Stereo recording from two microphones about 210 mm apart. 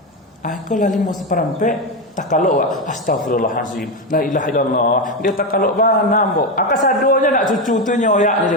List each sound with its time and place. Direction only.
0.7 s a man's voice: 35° left (ahead or behind)